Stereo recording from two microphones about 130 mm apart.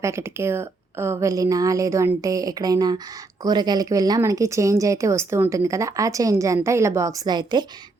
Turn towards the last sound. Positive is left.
turn(degrees=-35)  # may be behind; listen again after turning